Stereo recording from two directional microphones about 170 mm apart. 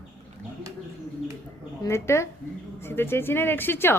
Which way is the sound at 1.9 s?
15° left (ahead or behind).